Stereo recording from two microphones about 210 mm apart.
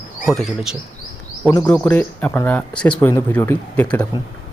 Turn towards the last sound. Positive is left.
turn(degrees=20)  # may be behind; listen again after turning